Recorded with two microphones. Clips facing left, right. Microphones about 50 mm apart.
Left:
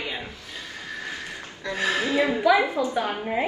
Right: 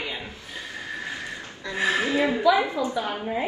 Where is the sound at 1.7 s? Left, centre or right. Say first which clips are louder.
Even; right.